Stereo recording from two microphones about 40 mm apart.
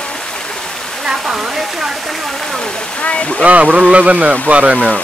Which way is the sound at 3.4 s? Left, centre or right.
Right.